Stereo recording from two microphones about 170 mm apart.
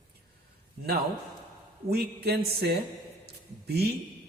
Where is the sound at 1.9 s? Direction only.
70° right (ahead or behind).